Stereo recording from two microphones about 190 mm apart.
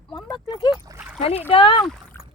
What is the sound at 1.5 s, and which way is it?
Speech, 25° left (ahead or behind).